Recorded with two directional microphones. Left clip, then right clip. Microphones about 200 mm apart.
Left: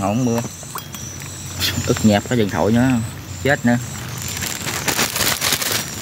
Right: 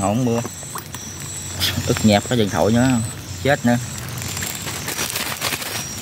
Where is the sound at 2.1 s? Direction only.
5° right (ahead or behind).